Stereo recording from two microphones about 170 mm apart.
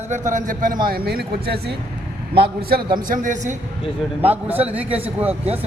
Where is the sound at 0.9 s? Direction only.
65° right (ahead or behind).